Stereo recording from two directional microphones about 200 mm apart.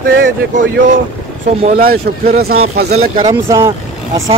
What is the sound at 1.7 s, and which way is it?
A man's voice, 50° right (ahead or behind).